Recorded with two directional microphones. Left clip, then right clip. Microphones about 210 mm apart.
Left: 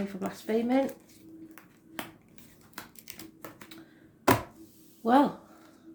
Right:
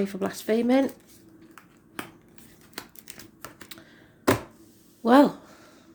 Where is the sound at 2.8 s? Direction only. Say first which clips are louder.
Right 3 dB; 10° right (ahead or behind).